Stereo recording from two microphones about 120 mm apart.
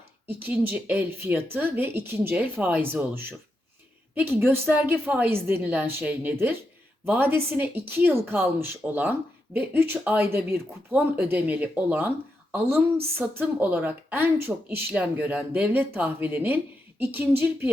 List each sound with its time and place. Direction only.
0.3 s speech: 15° right (ahead or behind)
4.1 s speech: 15° right (ahead or behind)
13.1 s speech: 15° right (ahead or behind)